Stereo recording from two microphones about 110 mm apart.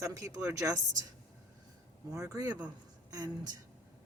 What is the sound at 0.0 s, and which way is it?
Speech, 30° right (ahead or behind).